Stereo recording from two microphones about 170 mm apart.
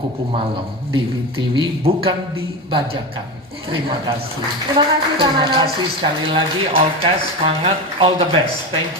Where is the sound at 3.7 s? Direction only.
30° right (ahead or behind).